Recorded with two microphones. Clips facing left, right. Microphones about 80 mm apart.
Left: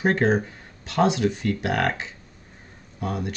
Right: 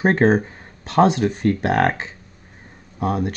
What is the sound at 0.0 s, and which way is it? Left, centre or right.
Speech, right.